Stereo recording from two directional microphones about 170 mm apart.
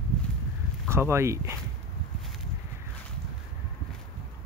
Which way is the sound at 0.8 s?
15° right (ahead or behind).